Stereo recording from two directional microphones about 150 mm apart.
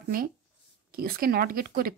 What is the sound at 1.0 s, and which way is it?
Speech, 90° right.